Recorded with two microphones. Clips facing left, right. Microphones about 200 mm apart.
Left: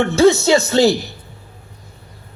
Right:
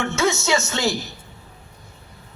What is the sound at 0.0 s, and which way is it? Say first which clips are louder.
Speech: left 10 dB; 35° left (ahead or behind).